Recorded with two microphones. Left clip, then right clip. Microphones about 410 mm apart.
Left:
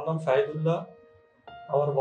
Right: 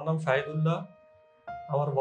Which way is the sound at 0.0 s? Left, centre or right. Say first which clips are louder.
Left 3 dB; right.